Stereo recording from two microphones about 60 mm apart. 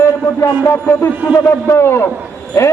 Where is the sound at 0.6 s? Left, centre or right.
Left.